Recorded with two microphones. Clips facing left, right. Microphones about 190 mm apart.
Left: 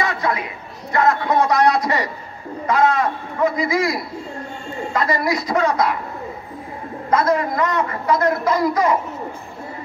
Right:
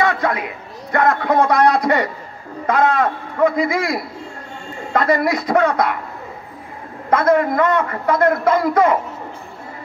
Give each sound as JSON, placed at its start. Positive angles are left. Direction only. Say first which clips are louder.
{"t": 0.0, "sound": "chatter", "louder": "right 3 dB", "side_deg": -60}
{"t": 0.9, "sound": "a man's voice", "louder": "right 1 dB", "side_deg": -55}
{"t": 7.1, "sound": "a man's voice", "louder": "right 3 dB", "side_deg": -55}